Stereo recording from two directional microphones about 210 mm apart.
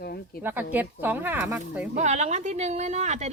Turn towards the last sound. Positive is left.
turn(degrees=-30)  # may be behind; listen again after turning